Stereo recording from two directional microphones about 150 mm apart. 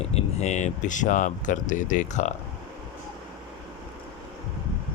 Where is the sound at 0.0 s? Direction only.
45° left (ahead or behind).